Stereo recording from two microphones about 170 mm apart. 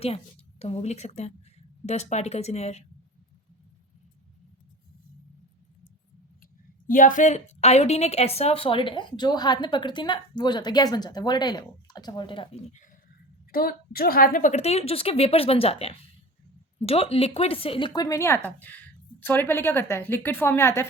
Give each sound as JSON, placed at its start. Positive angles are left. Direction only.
{"t": 0.6, "sound": "a woman's voice", "side_deg": 40}
{"t": 6.8, "sound": "a woman's voice", "side_deg": 50}
{"t": 13.5, "sound": "a woman's voice", "side_deg": 60}